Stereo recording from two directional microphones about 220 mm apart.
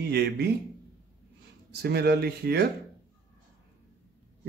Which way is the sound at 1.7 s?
45° right (ahead or behind).